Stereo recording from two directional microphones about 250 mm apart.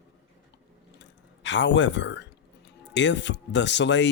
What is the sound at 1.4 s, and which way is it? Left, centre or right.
Speech, left.